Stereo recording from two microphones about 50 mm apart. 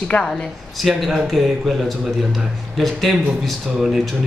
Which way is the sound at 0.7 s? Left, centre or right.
Centre.